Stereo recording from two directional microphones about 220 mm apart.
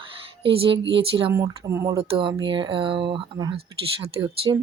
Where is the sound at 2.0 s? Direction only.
25° right (ahead or behind).